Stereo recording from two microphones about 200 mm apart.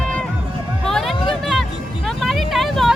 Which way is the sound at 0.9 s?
Centre (ahead or behind).